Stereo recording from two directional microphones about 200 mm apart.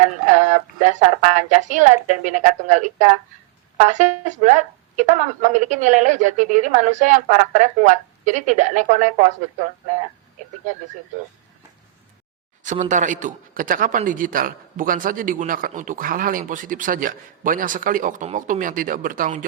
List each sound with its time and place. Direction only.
0.3 s a man's voice: 35° right (ahead or behind)
12.6 s a man's voice: 40° right (ahead or behind)